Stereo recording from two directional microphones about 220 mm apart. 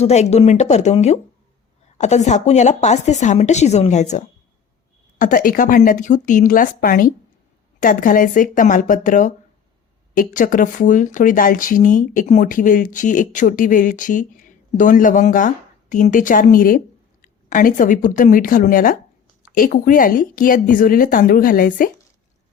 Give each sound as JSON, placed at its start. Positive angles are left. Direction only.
{"t": 0.0, "sound": "speech", "side_deg": 30}
{"t": 5.2, "sound": "speech", "side_deg": 40}